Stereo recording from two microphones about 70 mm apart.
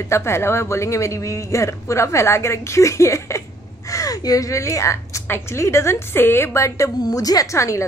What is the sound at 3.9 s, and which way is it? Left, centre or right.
Speech, left.